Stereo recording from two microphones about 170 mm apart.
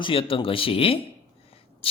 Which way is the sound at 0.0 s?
30° left (ahead or behind).